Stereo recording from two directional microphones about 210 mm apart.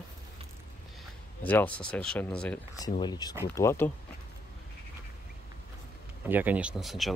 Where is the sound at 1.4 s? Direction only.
10° left (ahead or behind).